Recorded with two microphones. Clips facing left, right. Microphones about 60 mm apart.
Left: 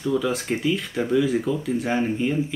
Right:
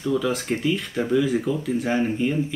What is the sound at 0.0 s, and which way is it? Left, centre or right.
Speech, centre.